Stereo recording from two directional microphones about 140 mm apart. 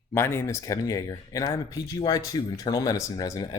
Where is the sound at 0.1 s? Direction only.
15° left (ahead or behind).